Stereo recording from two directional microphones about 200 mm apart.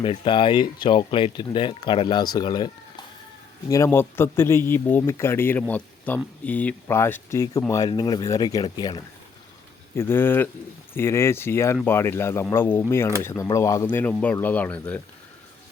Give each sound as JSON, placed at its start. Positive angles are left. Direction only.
{"t": 0.0, "sound": "speech", "side_deg": 25}
{"t": 3.7, "sound": "a man's voice", "side_deg": 15}